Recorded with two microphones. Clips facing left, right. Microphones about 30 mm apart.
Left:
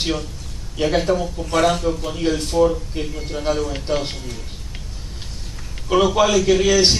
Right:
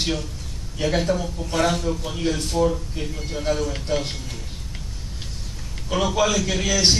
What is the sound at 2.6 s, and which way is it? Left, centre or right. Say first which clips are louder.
Speech: left 5 dB; left.